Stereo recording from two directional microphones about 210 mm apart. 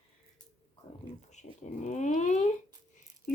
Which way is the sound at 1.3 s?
35° left (ahead or behind).